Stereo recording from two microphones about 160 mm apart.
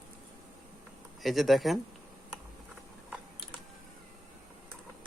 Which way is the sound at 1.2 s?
Centre (ahead or behind).